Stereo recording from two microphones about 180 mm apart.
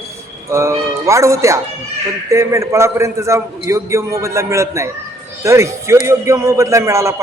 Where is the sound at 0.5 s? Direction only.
15° right (ahead or behind).